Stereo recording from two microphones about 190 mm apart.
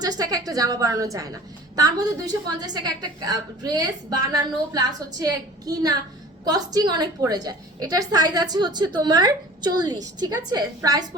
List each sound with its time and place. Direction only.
0.0 s a woman's voice: 20° right (ahead or behind)